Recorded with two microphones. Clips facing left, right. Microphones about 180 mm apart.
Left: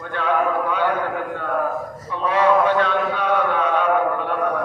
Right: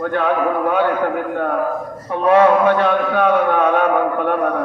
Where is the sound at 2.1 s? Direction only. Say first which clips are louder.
Right 5 dB; 55° right (ahead or behind).